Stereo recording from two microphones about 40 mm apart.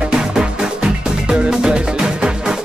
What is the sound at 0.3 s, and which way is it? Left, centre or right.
Music, centre.